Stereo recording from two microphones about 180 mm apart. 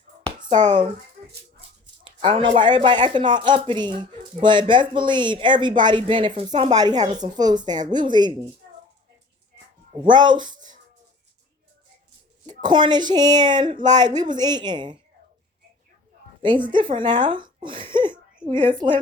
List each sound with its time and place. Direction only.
0.3 s a sound: 25° right (ahead or behind)
0.7 s speech: 25° right (ahead or behind)
2.6 s speech: 25° right (ahead or behind)
6.5 s speech: 40° right (ahead or behind)
6.7 s speech: 20° right (ahead or behind)
7.0 s speech: 40° right (ahead or behind)
7.3 s speech: 25° right (ahead or behind)
10.0 s speech: 25° right (ahead or behind)
12.5 s speech: 25° right (ahead or behind)
16.4 s a woman's voice: 25° right (ahead or behind)